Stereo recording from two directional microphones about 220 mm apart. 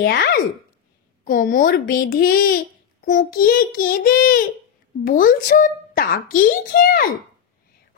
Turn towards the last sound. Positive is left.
turn(degrees=40)  # may be behind; listen again after turning